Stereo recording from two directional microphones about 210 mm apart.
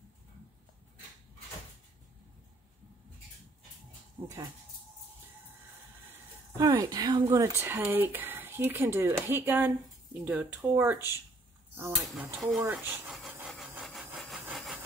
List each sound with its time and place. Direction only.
4.2 s a sound: 25° right (ahead or behind)
6.6 s speech: 15° right (ahead or behind)
12.8 s wood: 5° right (ahead or behind)
14.4 s sawing: centre (ahead or behind)